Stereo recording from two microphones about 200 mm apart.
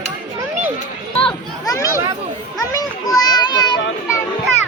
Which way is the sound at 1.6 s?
15° left (ahead or behind).